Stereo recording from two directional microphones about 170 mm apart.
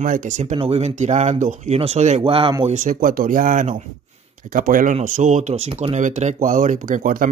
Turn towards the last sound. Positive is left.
turn(degrees=-55)  # may be behind; listen again after turning